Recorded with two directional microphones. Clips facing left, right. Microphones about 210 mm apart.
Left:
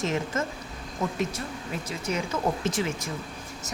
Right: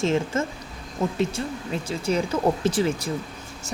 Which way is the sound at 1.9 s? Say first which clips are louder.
Right 6 dB; 30° right (ahead or behind).